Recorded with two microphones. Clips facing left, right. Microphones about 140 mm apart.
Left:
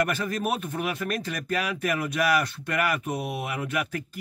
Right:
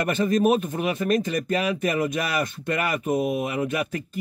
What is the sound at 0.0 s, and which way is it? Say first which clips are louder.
Speech: right 6 dB; 20° right (ahead or behind).